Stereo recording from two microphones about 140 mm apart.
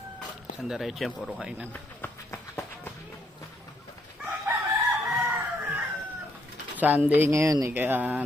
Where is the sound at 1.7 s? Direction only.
15° left (ahead or behind).